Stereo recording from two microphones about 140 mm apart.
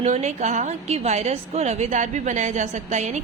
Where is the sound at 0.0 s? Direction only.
55° right (ahead or behind).